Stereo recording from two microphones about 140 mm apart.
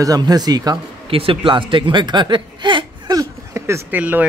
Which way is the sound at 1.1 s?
40° right (ahead or behind).